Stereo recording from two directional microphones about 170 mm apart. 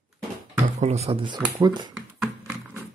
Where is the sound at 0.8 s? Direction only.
40° right (ahead or behind).